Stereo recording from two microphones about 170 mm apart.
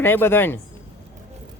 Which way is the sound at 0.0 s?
15° left (ahead or behind).